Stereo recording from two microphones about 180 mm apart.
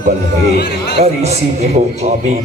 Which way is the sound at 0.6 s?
70° left (ahead or behind).